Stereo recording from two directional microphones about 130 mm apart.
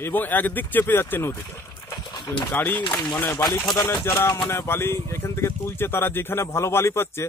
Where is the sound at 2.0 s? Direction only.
40° left (ahead or behind).